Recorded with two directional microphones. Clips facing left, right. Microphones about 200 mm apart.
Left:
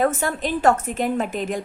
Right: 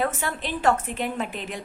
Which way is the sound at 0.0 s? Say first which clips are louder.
Left 6 dB; 45° left (ahead or behind).